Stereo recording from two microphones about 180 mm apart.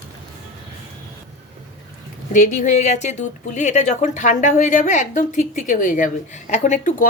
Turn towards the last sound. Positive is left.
turn(degrees=45)  # may be behind; listen again after turning